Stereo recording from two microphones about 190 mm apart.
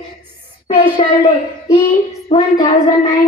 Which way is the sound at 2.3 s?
30° left (ahead or behind).